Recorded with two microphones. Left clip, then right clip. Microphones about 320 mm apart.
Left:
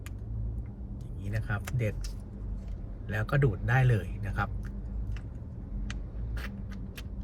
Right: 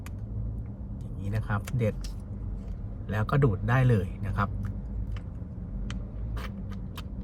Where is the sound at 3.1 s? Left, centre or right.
Centre.